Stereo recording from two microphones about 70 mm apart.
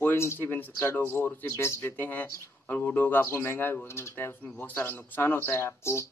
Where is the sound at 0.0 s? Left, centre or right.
Left.